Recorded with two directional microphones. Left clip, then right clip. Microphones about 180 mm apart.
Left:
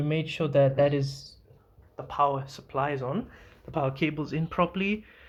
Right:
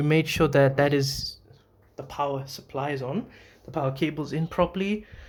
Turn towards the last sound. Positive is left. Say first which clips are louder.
# right 1 dB
turn(degrees=-15)  # may be behind; listen again after turning